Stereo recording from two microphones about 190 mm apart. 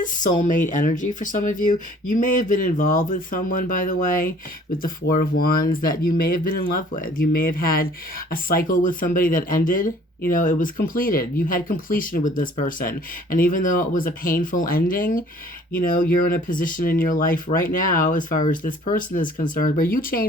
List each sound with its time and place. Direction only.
0.0 s speech: 45° left (ahead or behind)